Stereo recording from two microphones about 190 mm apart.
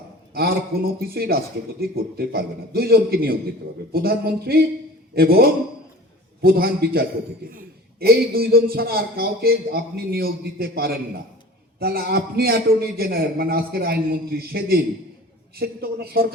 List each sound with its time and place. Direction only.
0.3 s a man's voice: 55° right (ahead or behind)